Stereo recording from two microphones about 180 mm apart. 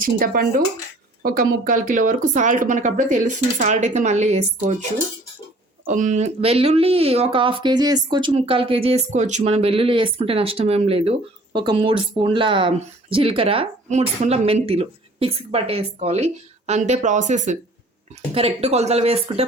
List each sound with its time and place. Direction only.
0.0 s speech: 50° right (ahead or behind); by 19.5 s 35° right (ahead or behind)